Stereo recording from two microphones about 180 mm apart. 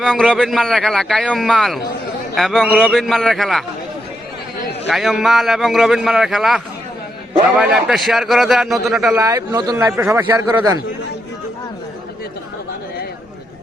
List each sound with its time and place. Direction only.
0.0 s speech: centre (ahead or behind)
4.9 s speech: centre (ahead or behind)
9.1 s a man's voice: 20° right (ahead or behind)